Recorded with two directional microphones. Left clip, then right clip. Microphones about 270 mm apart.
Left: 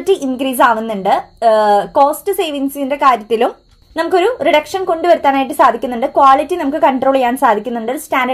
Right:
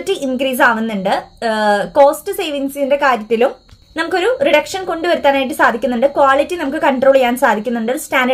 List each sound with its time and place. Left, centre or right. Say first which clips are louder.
0.0 s a woman's voice: left 2 dB; centre